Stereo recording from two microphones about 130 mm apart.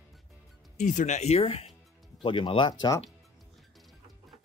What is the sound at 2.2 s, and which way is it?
Speech, 40° left (ahead or behind).